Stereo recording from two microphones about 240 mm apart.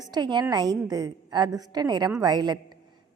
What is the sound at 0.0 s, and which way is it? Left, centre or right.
A woman's voice, centre.